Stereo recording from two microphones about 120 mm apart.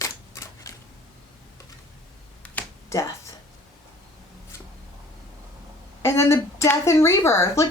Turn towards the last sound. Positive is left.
turn(degrees=25)  # may be behind; listen again after turning